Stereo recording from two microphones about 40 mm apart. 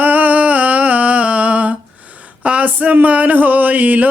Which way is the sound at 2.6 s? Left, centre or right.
Right.